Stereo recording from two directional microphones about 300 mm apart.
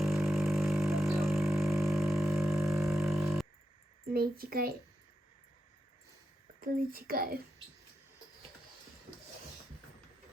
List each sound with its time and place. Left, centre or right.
0.0 s a sound: centre
4.1 s speech: right
6.6 s speech: right